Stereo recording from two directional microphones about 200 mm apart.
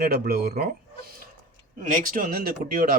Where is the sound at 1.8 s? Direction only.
40° right (ahead or behind).